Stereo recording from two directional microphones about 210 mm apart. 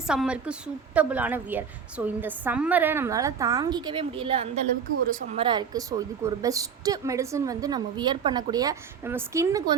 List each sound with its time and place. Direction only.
0.1 s a woman's voice: 5° right (ahead or behind)